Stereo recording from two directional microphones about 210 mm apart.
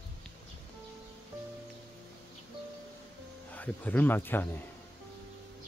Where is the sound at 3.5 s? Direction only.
10° left (ahead or behind).